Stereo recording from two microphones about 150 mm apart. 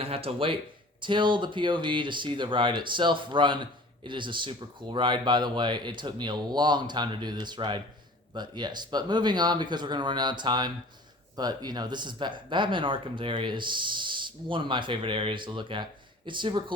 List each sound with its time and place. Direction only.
0.0 s speech: 40° right (ahead or behind)